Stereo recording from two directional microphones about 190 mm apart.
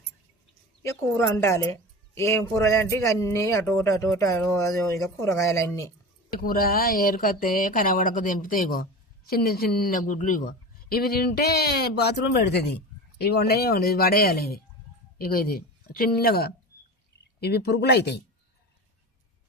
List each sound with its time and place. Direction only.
0.8 s speech: 15° left (ahead or behind)
6.4 s speech: 50° left (ahead or behind)